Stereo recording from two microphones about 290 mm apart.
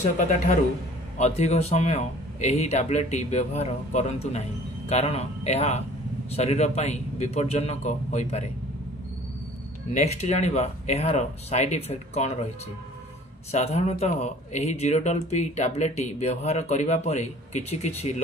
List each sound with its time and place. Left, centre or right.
0.2 s speech: left
9.9 s speech: left
13.5 s speech: left